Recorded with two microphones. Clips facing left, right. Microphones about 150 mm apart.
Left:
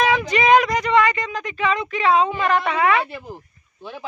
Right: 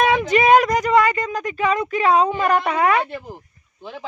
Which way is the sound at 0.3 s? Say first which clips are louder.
Right 2 dB; 45° right (ahead or behind).